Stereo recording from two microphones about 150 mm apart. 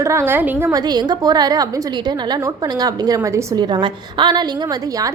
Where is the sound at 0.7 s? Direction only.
25° right (ahead or behind).